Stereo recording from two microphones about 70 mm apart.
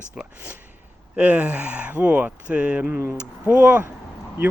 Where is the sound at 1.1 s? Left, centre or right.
Centre.